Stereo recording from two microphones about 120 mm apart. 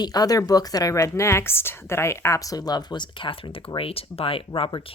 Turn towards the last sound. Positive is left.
turn(degrees=45)  # may be behind; listen again after turning